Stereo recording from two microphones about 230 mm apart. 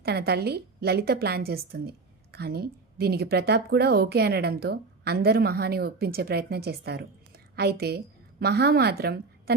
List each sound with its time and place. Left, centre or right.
0.0 s a woman's voice: right